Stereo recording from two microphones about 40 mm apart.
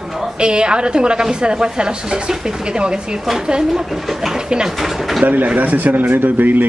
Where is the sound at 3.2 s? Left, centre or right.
Centre.